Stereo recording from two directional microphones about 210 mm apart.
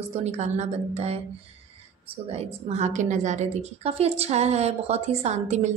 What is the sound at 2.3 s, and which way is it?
A woman's voice, 30° right (ahead or behind).